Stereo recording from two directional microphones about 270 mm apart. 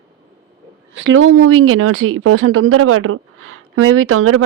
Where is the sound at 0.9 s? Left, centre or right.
Right.